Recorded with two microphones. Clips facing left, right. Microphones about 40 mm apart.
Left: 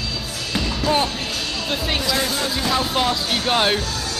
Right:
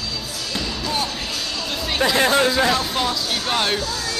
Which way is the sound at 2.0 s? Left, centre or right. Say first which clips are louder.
Right 10 dB; right.